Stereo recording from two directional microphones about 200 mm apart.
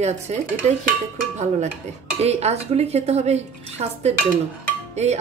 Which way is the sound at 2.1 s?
30° right (ahead or behind).